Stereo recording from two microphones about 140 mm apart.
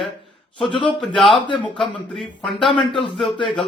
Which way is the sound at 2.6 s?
35° left (ahead or behind).